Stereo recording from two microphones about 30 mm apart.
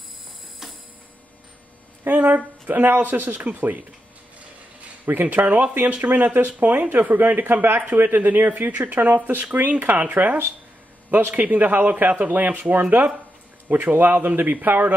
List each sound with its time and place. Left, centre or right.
2.0 s speech: right
5.0 s speech: right
11.1 s speech: right
11.4 s speech: right
13.7 s speech: right